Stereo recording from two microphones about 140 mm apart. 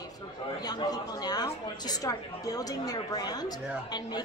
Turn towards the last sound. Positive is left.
turn(degrees=30)  # may be behind; listen again after turning